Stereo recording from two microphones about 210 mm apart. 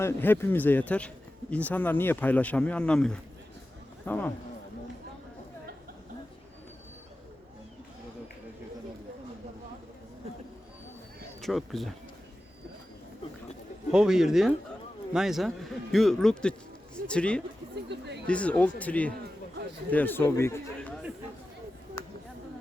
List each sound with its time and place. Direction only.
0.0 s speech: 10° left (ahead or behind)
11.3 s speech: centre (ahead or behind)
13.9 s speech: 5° right (ahead or behind)
17.8 s speech: 55° right (ahead or behind)
18.3 s speech: 5° left (ahead or behind)